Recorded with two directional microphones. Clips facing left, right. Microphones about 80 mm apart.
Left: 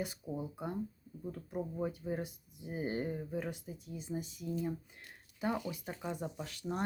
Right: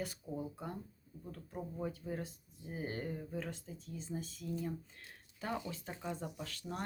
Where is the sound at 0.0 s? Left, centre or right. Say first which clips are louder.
Left 2 dB; centre.